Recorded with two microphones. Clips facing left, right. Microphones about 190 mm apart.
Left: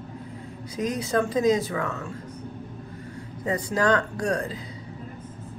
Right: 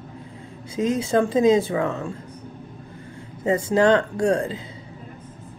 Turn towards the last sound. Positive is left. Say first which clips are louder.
# right 6 dB
turn(degrees=-25)  # may be behind; listen again after turning